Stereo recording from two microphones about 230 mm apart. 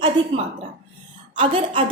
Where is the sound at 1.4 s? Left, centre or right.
Right.